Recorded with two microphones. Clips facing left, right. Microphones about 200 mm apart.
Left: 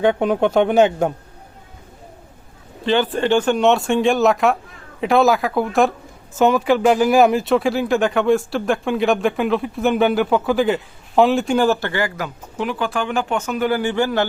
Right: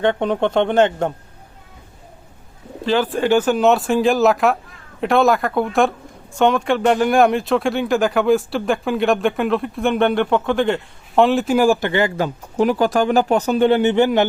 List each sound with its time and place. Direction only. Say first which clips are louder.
0.0 s a man's voice: left 1 dB; 5° left (ahead or behind)
2.8 s speech: even; centre (ahead or behind); by 14.3 s 20° right (ahead or behind)